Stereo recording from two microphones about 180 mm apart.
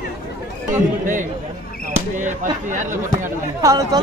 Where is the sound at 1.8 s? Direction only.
45° right (ahead or behind).